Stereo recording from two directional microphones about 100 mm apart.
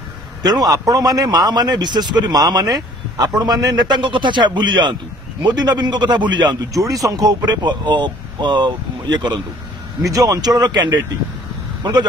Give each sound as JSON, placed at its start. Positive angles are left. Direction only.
{"t": 0.4, "sound": "a man's voice", "side_deg": -40}
{"t": 6.7, "sound": "a man's voice", "side_deg": -35}
{"t": 10.0, "sound": "speech", "side_deg": -35}